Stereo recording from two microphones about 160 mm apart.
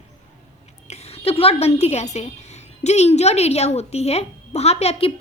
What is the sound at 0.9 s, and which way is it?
A woman's voice, 35° left (ahead or behind).